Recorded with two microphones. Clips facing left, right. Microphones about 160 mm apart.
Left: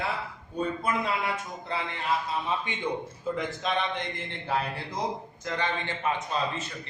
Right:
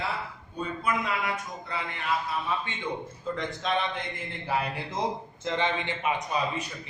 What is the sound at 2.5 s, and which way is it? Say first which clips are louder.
Speech: even; 20° left (ahead or behind).